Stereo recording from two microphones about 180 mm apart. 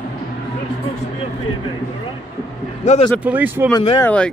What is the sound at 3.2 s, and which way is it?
Speech, 10° right (ahead or behind).